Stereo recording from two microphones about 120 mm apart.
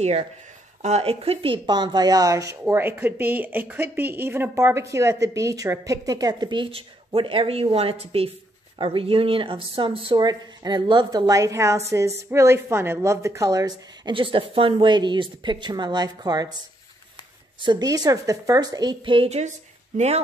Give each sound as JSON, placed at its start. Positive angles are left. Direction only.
{"t": 0.0, "sound": "a woman's voice", "side_deg": -65}
{"t": 2.6, "sound": "a woman's voice", "side_deg": -15}
{"t": 14.1, "sound": "speech", "side_deg": -45}
{"t": 17.6, "sound": "speech", "side_deg": -35}
{"t": 19.2, "sound": "a woman's voice", "side_deg": -65}